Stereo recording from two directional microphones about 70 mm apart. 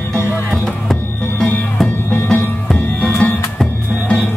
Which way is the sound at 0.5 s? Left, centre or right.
Centre.